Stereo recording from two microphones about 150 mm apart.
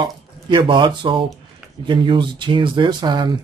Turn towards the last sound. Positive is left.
turn(degrees=-30)  # may be behind; listen again after turning